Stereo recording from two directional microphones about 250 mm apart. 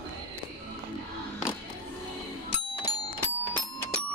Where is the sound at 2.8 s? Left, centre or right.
Centre.